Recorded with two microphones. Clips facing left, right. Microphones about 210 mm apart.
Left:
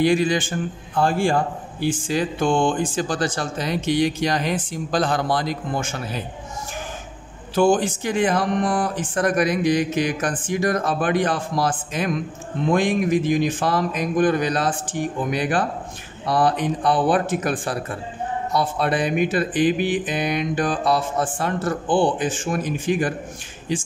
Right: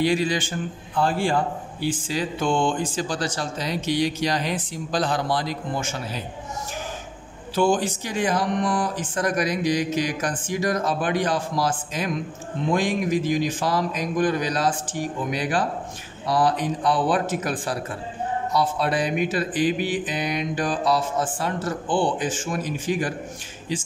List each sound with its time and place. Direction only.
0.0 s speech: 50° left (ahead or behind)
7.5 s speech: 50° left (ahead or behind)
12.7 s a man's voice: 55° left (ahead or behind)